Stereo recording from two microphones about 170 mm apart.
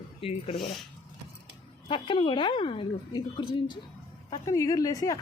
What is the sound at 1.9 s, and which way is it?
Speech, 30° left (ahead or behind).